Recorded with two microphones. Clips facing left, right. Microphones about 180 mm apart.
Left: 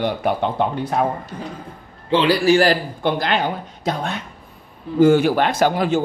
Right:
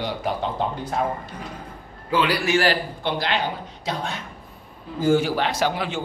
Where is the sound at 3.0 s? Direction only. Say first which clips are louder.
Left 5 dB; 50° left (ahead or behind).